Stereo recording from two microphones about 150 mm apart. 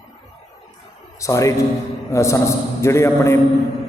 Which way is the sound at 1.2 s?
20° left (ahead or behind).